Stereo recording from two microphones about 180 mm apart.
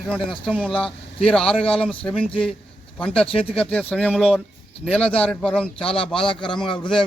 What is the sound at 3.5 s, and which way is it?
Speech, 5° left (ahead or behind).